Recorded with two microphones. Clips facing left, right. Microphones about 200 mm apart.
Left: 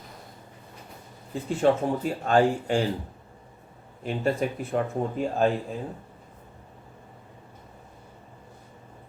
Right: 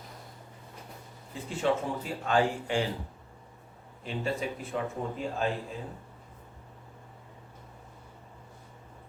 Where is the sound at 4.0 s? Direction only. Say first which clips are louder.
Left 6 dB; 50° left (ahead or behind).